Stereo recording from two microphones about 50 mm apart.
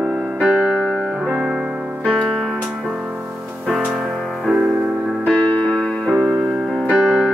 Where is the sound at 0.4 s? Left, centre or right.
Right.